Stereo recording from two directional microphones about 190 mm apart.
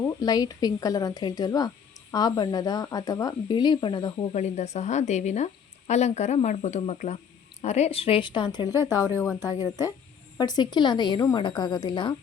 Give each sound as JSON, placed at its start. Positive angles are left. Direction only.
{"t": 0.0, "sound": "speech", "side_deg": 20}